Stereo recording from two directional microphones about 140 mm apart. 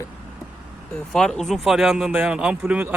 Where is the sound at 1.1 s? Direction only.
5° left (ahead or behind).